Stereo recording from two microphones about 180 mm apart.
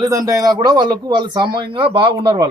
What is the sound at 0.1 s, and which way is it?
Speech, 20° right (ahead or behind).